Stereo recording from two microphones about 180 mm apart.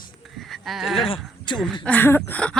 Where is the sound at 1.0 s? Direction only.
30° left (ahead or behind).